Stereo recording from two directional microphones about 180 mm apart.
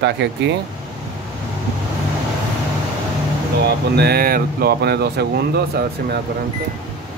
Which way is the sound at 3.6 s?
65° right (ahead or behind).